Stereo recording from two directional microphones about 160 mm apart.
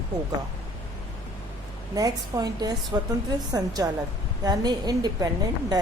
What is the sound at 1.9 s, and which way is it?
A woman's voice, 25° right (ahead or behind).